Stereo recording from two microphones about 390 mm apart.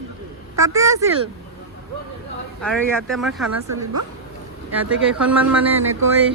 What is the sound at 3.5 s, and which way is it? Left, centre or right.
Speech, right.